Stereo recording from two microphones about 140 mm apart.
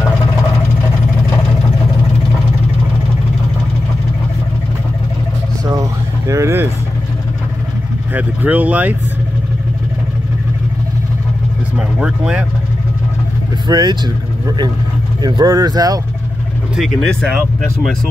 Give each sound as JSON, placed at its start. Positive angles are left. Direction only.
{"t": 5.7, "sound": "vehicle", "side_deg": -25}
{"t": 8.1, "sound": "speech", "side_deg": -10}
{"t": 12.0, "sound": "speech", "side_deg": -5}
{"t": 13.7, "sound": "speech", "side_deg": -30}
{"t": 15.2, "sound": "speech", "side_deg": -30}
{"t": 16.7, "sound": "speech", "side_deg": 0}